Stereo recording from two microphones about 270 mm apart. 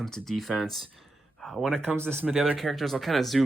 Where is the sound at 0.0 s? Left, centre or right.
Centre.